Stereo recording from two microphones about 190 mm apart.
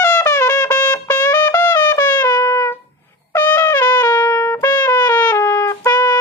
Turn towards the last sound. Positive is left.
turn(degrees=20)  # may be behind; listen again after turning